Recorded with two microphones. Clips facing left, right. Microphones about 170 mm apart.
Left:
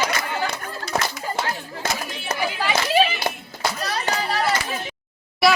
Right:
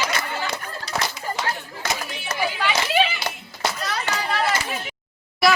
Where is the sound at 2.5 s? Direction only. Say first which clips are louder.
Left 3 dB; 35° left (ahead or behind).